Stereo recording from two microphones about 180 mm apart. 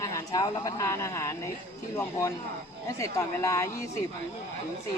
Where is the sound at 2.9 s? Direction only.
15° left (ahead or behind).